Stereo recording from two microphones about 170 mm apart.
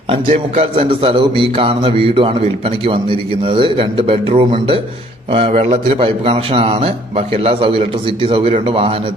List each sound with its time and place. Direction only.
0.1 s a man's voice: 35° right (ahead or behind)